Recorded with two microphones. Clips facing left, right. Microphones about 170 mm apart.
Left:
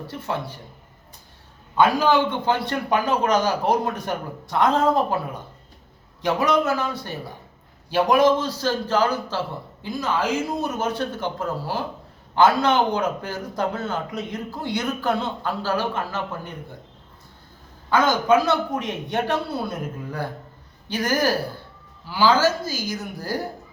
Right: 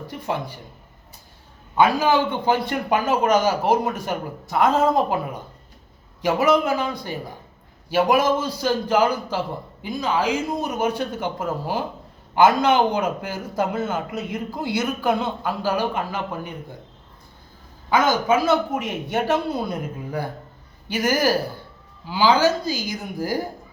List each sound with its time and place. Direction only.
0.1 s a man's voice: 15° right (ahead or behind)
1.7 s a man's voice: 10° right (ahead or behind)
17.8 s a man's voice: 10° right (ahead or behind)